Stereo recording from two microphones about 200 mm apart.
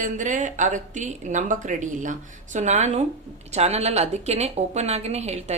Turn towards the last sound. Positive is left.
turn(degrees=-35)  # may be behind; listen again after turning